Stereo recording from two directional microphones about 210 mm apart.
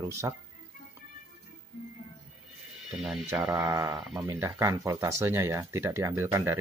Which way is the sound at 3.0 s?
Centre (ahead or behind).